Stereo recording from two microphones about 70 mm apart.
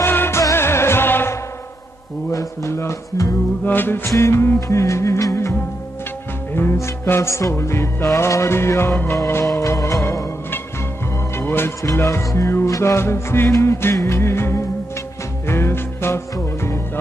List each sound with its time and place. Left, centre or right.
0.0 s music: left
3.6 s music: left
4.6 s music: left
6.5 s music: left
9.5 s music: left
11.3 s music: left